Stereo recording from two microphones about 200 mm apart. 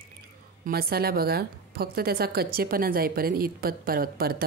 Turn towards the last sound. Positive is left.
turn(degrees=-50)  # may be behind; listen again after turning